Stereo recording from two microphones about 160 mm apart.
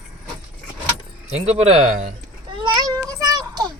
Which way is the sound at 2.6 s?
30° right (ahead or behind).